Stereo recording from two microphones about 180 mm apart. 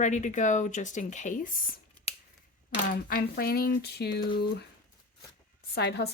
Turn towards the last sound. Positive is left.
turn(degrees=65)  # may be behind; listen again after turning